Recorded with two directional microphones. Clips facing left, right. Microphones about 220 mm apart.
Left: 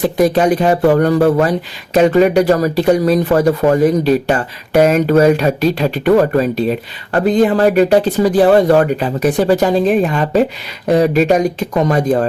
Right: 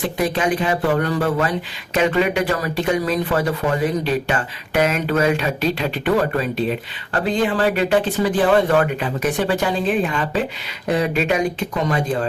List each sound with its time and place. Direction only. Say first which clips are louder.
0.2 s speech: left 8 dB; 40° left (ahead or behind)